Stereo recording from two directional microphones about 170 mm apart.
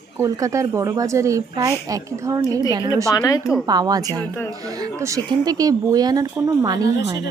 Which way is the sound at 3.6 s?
25° right (ahead or behind).